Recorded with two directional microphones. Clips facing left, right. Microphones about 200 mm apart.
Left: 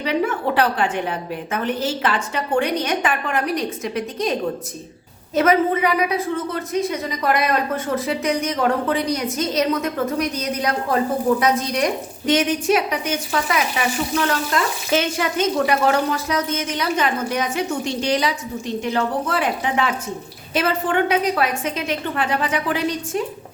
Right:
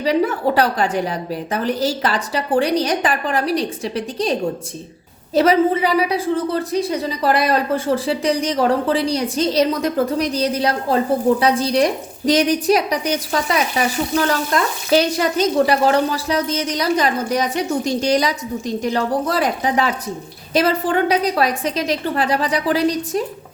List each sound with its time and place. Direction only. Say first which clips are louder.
0.0 s a woman's voice: right 4 dB; 35° right (ahead or behind)